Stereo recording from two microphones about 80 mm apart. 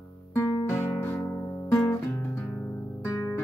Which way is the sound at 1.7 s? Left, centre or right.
Left.